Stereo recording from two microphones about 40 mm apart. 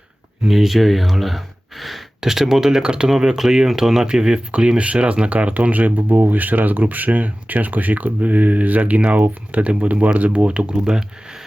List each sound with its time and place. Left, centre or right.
0.4 s speech: centre
4.0 s speech: right